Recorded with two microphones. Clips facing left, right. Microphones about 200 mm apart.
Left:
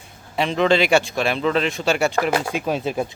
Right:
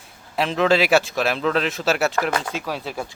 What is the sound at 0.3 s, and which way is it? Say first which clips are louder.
A man's voice: left 1 dB; centre (ahead or behind).